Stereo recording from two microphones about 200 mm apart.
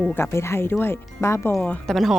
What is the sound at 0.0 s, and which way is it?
Speech, 10° left (ahead or behind).